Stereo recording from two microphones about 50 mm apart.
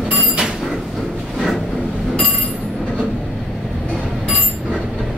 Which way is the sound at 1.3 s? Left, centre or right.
Centre.